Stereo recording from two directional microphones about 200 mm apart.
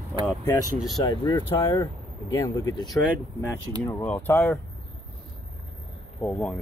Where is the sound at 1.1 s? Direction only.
20° left (ahead or behind).